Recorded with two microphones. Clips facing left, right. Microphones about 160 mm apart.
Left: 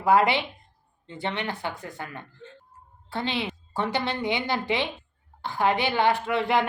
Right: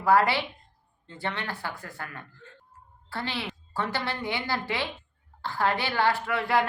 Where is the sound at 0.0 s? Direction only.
20° left (ahead or behind).